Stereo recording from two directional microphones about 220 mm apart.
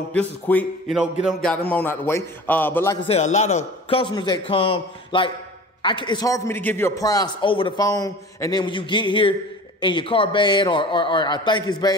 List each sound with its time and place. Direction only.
0.1 s a man's voice: 5° left (ahead or behind)
1.2 s a sound: 5° left (ahead or behind)
1.7 s a man's voice: 10° left (ahead or behind)
3.1 s a man's voice: 30° left (ahead or behind)